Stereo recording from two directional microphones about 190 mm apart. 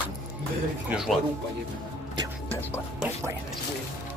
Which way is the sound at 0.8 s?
5° right (ahead or behind).